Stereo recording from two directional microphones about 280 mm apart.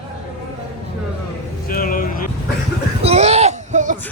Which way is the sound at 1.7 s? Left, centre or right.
Left.